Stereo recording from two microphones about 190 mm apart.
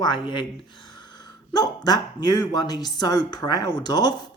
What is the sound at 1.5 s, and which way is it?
Speech, 20° left (ahead or behind).